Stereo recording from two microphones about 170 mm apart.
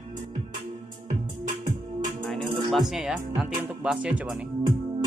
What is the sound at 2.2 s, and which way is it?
Speech, centre (ahead or behind).